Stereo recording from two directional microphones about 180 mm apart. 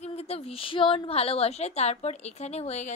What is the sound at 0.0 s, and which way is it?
A woman's voice, 35° left (ahead or behind).